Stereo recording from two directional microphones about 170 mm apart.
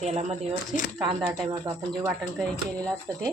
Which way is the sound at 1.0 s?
25° right (ahead or behind).